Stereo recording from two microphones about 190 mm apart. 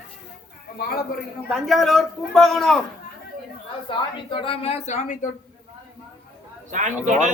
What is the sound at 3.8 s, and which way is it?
A woman's voice, 25° left (ahead or behind).